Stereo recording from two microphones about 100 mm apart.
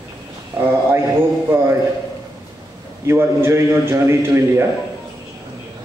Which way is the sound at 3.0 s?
25° right (ahead or behind).